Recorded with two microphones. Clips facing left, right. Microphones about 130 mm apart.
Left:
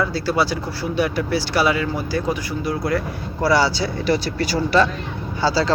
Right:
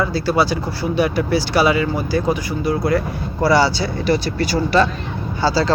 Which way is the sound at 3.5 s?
10° left (ahead or behind).